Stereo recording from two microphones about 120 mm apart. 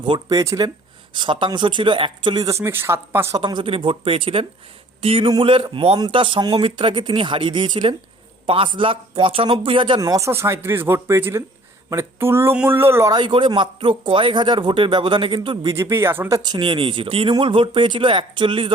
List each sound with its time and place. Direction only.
0.0 s speech: 35° right (ahead or behind)
1.1 s speech: 40° right (ahead or behind); by 3.2 s 20° right (ahead or behind)
3.3 s speech: 40° right (ahead or behind)
10.0 s speech: 25° right (ahead or behind)
13.1 s speech: 40° right (ahead or behind)
15.7 s speech: 25° right (ahead or behind)
16.4 s speech: 40° right (ahead or behind)